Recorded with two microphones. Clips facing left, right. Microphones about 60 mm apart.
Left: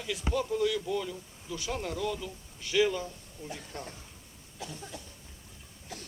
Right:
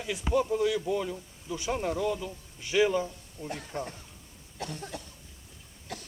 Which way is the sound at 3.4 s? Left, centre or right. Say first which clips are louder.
Right 4 dB; right.